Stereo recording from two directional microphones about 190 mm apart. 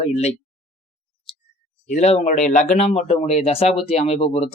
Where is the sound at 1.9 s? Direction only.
35° left (ahead or behind).